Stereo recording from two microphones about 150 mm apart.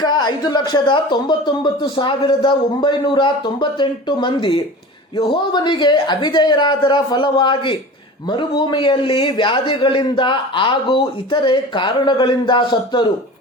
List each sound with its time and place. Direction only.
0.0 s a man's voice: 30° left (ahead or behind)